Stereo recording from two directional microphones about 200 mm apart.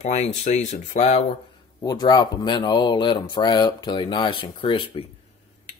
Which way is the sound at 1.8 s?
20° left (ahead or behind).